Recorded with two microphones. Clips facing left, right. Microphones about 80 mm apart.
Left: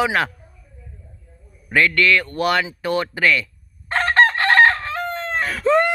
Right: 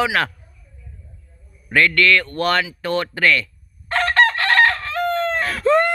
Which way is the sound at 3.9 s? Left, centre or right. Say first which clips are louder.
Left 1 dB; left.